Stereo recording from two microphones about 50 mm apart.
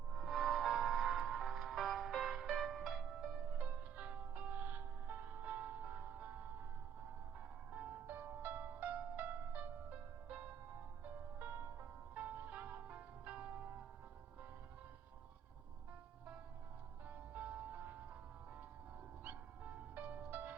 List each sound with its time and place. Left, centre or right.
0.1 s music: centre
3.5 s music: right
7.7 s music: right
11.5 s music: right
12.1 s music: right
17.1 s music: right
19.6 s music: right